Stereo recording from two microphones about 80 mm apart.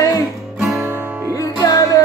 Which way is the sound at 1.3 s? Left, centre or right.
Left.